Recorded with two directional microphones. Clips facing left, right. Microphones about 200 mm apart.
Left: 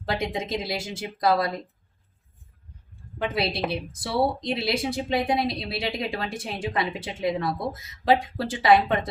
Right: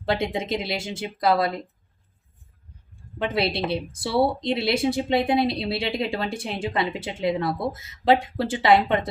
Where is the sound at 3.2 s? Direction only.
25° right (ahead or behind).